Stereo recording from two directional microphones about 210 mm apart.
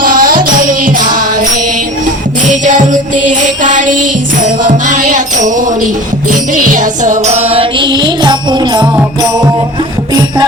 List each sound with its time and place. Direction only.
0.0 s music: 45° right (ahead or behind); by 9.0 s 20° right (ahead or behind)